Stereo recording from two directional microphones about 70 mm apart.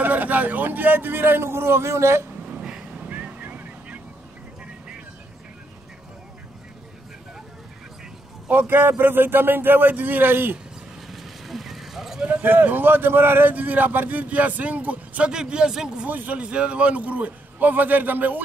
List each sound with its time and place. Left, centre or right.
0.0 s a man's voice: right
2.4 s a sound: centre
3.1 s vehicle: right
8.5 s a man's voice: right
11.1 s vehicle: centre
12.2 s a man's voice: right; by 16.1 s centre
16.1 s a man's voice: right